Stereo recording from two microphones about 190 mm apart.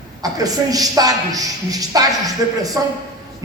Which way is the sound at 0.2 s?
20° right (ahead or behind).